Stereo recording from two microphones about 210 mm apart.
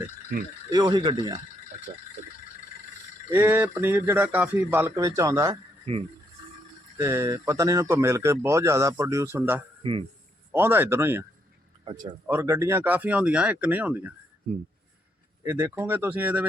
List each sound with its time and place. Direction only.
0.7 s speech: 20° right (ahead or behind)
3.2 s speech: 10° right (ahead or behind)
5.8 s speech: 30° right (ahead or behind)
6.9 s speech: 15° right (ahead or behind)
12.3 s speech: 15° right (ahead or behind)
15.4 s speech: 10° right (ahead or behind)